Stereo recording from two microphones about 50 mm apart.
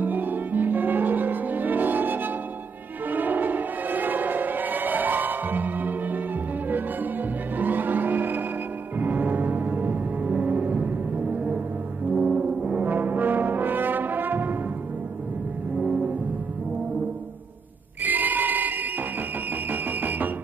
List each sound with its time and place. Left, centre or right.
0.0 s music: right
7.5 s music: right
12.2 s music: right
12.8 s brass instrument: right
18.0 s choir: right
19.7 s music: right